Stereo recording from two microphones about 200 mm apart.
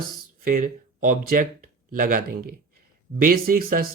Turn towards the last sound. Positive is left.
turn(degrees=-45)  # may be behind; listen again after turning